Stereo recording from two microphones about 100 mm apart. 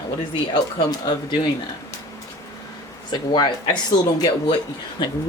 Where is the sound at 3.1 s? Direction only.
50° left (ahead or behind).